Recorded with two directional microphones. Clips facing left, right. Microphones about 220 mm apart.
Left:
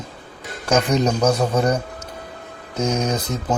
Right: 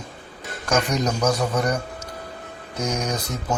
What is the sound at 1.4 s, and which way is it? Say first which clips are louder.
Speech: left 4 dB; 30° left (ahead or behind).